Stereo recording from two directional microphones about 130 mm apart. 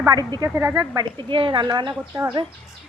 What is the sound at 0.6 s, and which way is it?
Speech, 25° right (ahead or behind).